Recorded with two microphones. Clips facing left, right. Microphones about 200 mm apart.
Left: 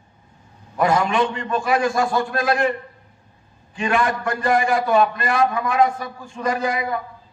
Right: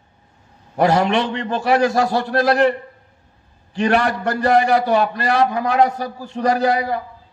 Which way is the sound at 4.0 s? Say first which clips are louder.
Right 2 dB; 40° right (ahead or behind).